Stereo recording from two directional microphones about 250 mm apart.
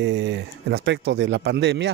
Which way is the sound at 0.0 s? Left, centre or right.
Right.